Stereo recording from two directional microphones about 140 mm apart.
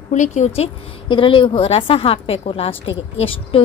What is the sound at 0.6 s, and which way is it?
A woman's voice, 35° left (ahead or behind).